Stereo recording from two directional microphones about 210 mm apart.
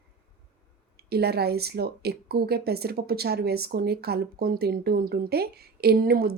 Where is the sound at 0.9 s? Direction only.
50° right (ahead or behind).